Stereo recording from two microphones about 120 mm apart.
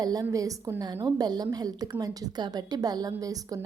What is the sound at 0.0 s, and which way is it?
A woman's voice, 30° right (ahead or behind).